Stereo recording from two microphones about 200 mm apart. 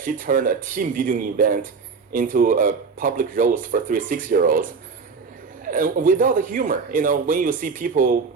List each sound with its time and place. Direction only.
0.0 s speech: 45° right (ahead or behind)
5.6 s speech: 40° right (ahead or behind)